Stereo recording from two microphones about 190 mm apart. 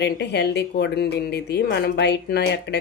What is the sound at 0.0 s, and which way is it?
Speech, 60° left (ahead or behind).